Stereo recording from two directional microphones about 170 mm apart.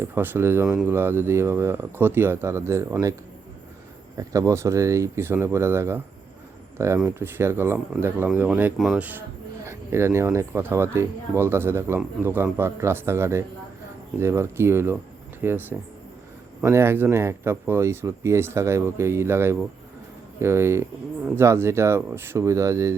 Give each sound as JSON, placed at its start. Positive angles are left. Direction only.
{"t": 0.0, "sound": "speech", "side_deg": -15}
{"t": 4.2, "sound": "speech", "side_deg": -20}
{"t": 9.6, "sound": "speech", "side_deg": -15}
{"t": 16.6, "sound": "speech", "side_deg": -15}